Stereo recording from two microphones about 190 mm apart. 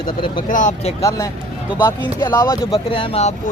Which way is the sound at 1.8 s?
15° left (ahead or behind).